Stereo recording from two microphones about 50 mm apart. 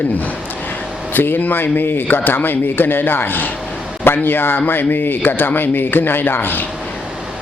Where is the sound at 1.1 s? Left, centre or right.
Left.